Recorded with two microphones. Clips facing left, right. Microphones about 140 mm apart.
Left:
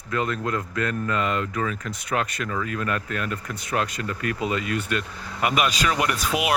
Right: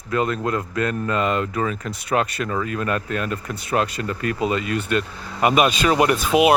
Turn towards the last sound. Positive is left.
turn(degrees=-25)  # may be behind; listen again after turning